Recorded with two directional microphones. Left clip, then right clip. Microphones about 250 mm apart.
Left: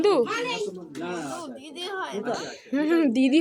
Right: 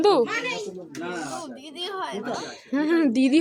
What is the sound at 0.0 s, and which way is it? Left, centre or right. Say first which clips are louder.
Speech: right 2 dB; centre.